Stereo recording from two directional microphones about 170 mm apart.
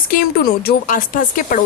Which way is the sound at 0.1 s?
60° left (ahead or behind).